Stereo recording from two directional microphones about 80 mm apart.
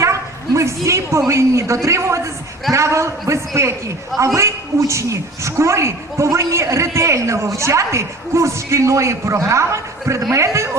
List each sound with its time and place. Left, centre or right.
0.0 s bow-wow: right
1.3 s a woman's voice: right